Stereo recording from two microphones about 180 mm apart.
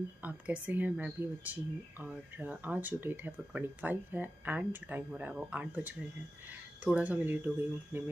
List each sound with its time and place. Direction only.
0.2 s speech: 10° right (ahead or behind)